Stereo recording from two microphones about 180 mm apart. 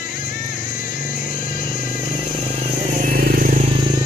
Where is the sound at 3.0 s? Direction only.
50° right (ahead or behind).